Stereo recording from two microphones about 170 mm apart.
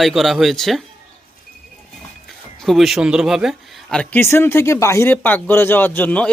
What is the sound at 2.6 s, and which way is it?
Speech, centre (ahead or behind).